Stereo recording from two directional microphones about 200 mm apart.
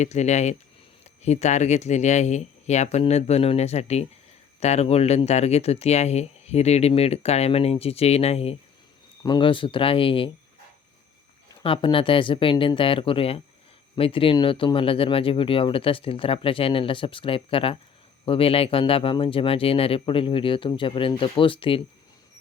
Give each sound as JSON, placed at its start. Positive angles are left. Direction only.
{"t": 0.0, "sound": "speech", "side_deg": 35}
{"t": 11.6, "sound": "speech", "side_deg": 25}